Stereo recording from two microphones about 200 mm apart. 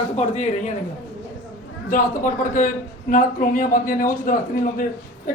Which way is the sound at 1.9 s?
40° left (ahead or behind).